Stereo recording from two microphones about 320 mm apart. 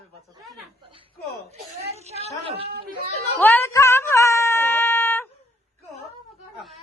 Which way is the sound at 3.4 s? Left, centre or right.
Centre.